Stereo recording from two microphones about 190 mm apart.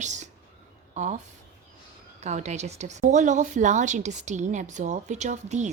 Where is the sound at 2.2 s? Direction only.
40° right (ahead or behind).